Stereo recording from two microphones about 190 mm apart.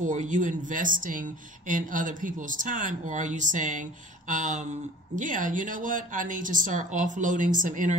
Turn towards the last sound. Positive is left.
turn(degrees=-45)  # may be behind; listen again after turning